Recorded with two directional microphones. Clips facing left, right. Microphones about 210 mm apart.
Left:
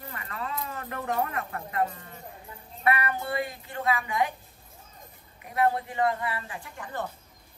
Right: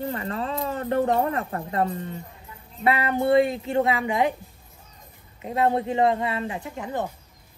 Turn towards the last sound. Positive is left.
turn(degrees=-20)  # may be behind; listen again after turning